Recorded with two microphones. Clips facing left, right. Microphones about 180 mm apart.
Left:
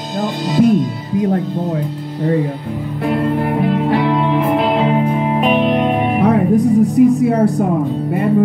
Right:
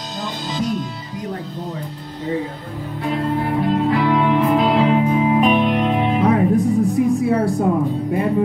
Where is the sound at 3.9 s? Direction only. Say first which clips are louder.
Left 2 dB; 25° left (ahead or behind).